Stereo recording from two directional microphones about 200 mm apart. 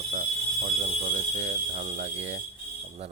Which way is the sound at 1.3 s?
35° right (ahead or behind).